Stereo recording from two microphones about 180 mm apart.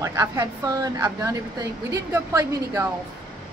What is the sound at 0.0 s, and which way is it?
A woman's voice, 20° right (ahead or behind).